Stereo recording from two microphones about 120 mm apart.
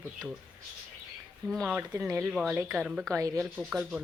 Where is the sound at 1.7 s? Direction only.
10° right (ahead or behind).